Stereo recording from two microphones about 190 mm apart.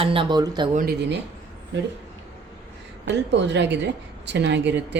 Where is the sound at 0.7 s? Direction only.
45° right (ahead or behind).